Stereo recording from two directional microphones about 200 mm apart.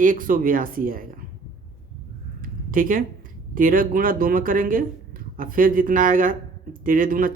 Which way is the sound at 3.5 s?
45° right (ahead or behind).